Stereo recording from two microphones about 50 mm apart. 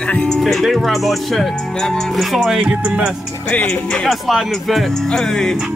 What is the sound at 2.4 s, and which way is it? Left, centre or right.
Speech, centre.